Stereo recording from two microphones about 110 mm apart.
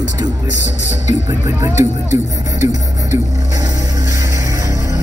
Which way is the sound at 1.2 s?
30° right (ahead or behind).